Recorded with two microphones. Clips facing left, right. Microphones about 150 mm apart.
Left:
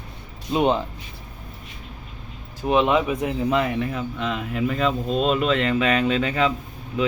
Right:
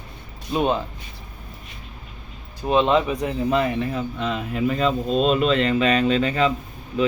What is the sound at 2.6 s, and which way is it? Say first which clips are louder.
Speech: right 1 dB; 15° left (ahead or behind).